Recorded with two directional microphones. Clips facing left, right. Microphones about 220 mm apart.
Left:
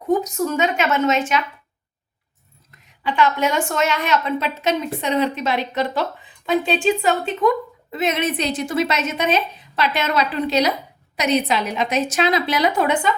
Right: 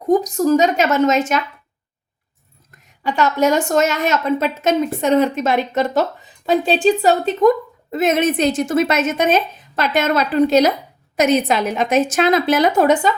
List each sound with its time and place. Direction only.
0.1 s a woman's voice: 35° right (ahead or behind)
2.7 s a woman's voice: 45° right (ahead or behind)